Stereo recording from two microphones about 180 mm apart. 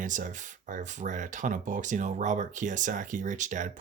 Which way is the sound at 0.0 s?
45° right (ahead or behind).